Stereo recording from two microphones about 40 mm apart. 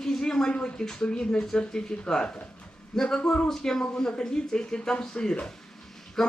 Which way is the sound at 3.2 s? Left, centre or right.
Left.